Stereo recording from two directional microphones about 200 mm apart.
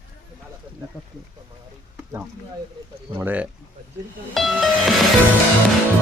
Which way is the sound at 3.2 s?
10° right (ahead or behind).